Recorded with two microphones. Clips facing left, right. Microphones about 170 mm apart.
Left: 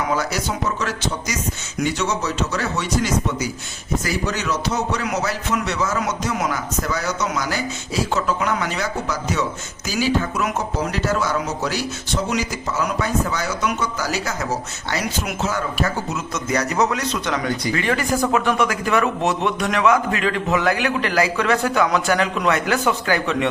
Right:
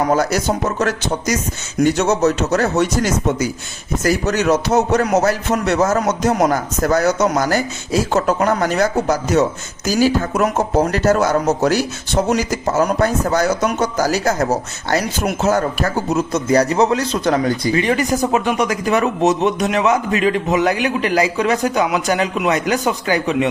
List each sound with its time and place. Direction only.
0.1 s speech: 45° right (ahead or behind)
17.7 s speech: 20° right (ahead or behind)